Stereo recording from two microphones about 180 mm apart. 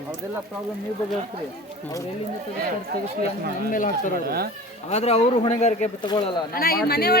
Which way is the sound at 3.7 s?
45° left (ahead or behind).